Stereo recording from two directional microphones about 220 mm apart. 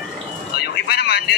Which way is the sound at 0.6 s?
50° left (ahead or behind).